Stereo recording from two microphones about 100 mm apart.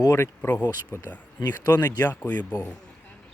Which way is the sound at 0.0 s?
25° left (ahead or behind).